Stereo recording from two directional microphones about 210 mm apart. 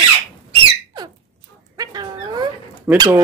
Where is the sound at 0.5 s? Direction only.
20° right (ahead or behind).